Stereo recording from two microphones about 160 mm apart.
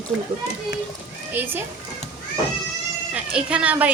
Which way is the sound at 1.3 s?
10° right (ahead or behind).